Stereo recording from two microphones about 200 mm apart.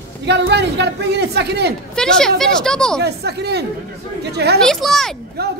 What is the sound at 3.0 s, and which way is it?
Speech, 55° right (ahead or behind).